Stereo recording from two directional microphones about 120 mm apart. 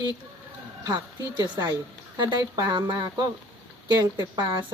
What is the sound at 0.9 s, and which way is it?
A woman's voice, 35° right (ahead or behind).